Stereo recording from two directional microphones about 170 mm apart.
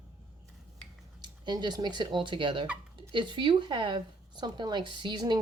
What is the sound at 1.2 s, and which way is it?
A woman's voice, 25° right (ahead or behind).